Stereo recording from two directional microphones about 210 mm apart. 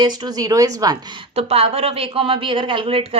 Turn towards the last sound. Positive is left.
turn(degrees=-25)  # may be behind; listen again after turning